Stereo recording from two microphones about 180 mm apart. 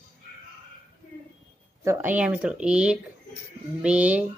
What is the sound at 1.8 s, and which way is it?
Speech, 15° right (ahead or behind).